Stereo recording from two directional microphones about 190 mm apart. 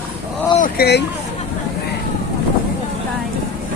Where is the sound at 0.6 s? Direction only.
55° left (ahead or behind).